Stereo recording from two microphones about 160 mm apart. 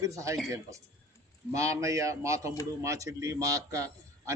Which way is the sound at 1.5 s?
20° right (ahead or behind).